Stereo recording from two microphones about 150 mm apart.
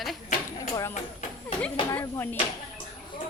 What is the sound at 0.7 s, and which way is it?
Speech, 20° left (ahead or behind).